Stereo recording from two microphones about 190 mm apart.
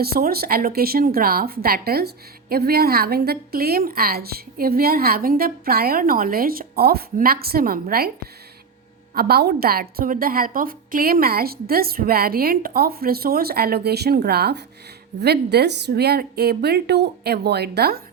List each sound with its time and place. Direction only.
0.0 s a woman's voice: 55° right (ahead or behind)
9.1 s a woman's voice: 55° right (ahead or behind)